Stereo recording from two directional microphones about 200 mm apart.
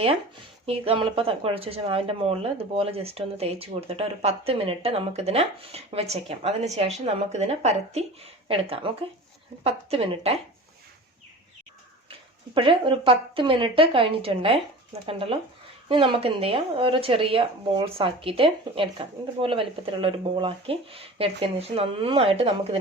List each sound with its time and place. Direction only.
0.6 s speech: 30° right (ahead or behind)
12.5 s speech: 25° right (ahead or behind)